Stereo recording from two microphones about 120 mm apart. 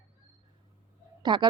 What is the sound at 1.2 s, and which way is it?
Speech, 40° right (ahead or behind).